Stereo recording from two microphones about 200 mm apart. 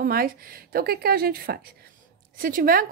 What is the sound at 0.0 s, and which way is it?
A woman's voice, 45° right (ahead or behind).